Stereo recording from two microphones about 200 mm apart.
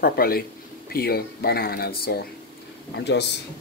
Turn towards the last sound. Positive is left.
turn(degrees=55)  # may be behind; listen again after turning